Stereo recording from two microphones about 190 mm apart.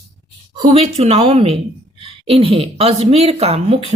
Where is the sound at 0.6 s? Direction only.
35° right (ahead or behind).